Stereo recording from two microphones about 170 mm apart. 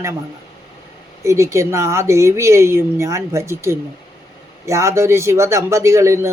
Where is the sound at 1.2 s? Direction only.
15° right (ahead or behind).